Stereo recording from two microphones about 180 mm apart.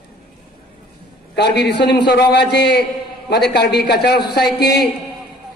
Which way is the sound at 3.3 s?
65° left (ahead or behind).